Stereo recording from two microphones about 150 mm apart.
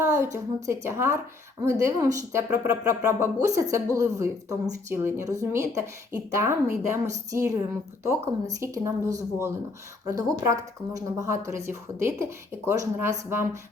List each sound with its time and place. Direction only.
0.0 s speech: 20° right (ahead or behind)
8.6 s speech: 20° right (ahead or behind)